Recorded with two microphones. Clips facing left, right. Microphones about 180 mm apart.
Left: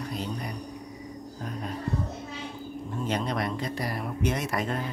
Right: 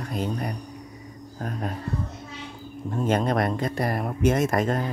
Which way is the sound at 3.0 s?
50° right (ahead or behind).